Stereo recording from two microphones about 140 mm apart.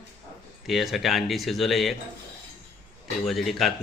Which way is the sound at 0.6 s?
Centre (ahead or behind).